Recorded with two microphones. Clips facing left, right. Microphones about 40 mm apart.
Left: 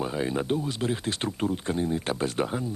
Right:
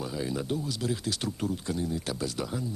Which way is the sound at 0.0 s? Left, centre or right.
Left.